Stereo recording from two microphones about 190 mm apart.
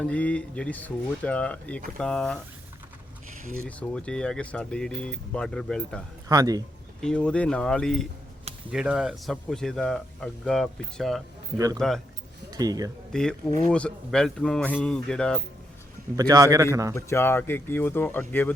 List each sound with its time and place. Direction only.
0.0 s speech: 5° left (ahead or behind)
3.7 s speech: 5° left (ahead or behind)
6.2 s speech: 20° right (ahead or behind)
7.0 s speech: 5° left (ahead or behind)
11.5 s a man's voice: 20° right (ahead or behind)
13.1 s speech: 5° left (ahead or behind)
16.1 s a man's voice: 20° right (ahead or behind)
16.9 s speech: 15° left (ahead or behind)